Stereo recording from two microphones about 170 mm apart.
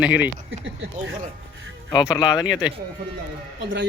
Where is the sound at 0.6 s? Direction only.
90° right.